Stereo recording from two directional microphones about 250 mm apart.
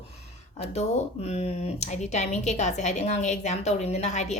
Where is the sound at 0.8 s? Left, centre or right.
Left.